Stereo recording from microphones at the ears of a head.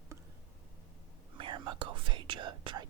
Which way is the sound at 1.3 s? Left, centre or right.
Right.